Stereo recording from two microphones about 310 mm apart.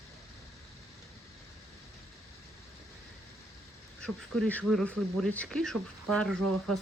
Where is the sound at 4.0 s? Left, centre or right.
Centre.